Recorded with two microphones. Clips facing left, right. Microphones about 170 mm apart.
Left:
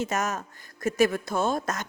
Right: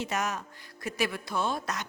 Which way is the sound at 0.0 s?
45° left (ahead or behind).